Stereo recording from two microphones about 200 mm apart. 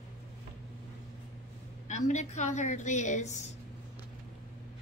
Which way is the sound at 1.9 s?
35° left (ahead or behind).